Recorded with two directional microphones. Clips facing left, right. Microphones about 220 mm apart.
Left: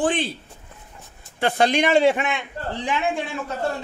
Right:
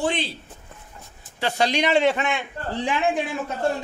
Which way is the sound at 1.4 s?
55° left (ahead or behind).